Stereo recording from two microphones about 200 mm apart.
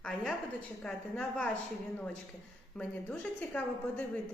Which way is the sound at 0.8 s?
5° left (ahead or behind).